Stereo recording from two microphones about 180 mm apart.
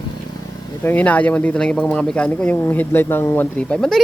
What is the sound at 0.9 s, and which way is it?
Speech, 10° left (ahead or behind).